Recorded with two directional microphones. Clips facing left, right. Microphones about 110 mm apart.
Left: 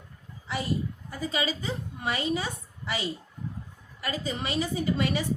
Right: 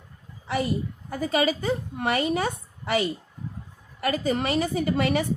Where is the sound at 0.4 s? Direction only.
60° right (ahead or behind).